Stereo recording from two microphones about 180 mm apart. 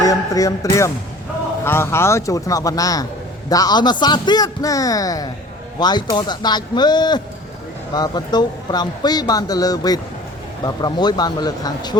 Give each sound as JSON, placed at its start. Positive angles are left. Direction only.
{"t": 0.0, "sound": "speech", "side_deg": 20}